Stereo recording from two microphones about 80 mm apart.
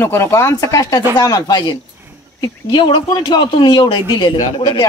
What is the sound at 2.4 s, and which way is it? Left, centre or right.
Speech, left.